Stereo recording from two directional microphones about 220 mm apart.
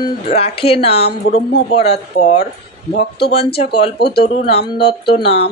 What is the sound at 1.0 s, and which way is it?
Speech, 45° left (ahead or behind).